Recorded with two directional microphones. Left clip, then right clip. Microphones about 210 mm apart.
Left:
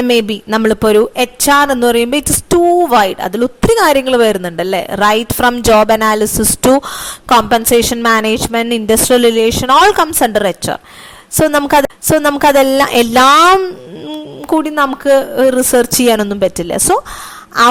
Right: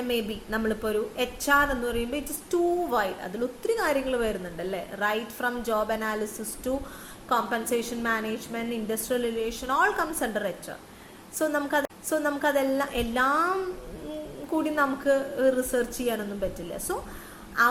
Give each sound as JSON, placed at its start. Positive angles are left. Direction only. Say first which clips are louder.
{"t": 0.1, "sound": "speech", "louder": "left 15 dB", "side_deg": 45}